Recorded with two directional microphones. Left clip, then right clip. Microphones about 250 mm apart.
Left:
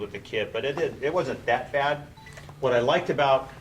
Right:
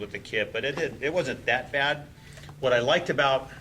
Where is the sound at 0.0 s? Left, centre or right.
Centre.